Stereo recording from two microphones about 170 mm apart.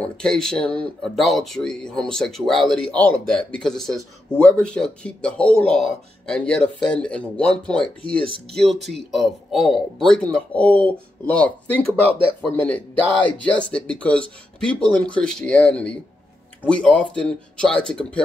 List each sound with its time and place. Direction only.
0.0 s speech: 5° left (ahead or behind)